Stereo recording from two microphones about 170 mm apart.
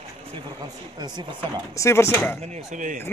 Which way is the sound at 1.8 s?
15° left (ahead or behind).